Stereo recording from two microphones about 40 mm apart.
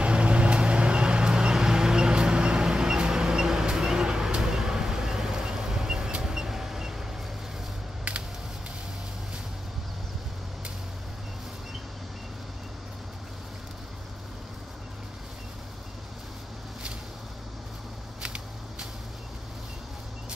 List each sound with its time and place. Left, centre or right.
0.0 s vehicle: right; by 7.1 s centre
18.2 s shuffling cards: right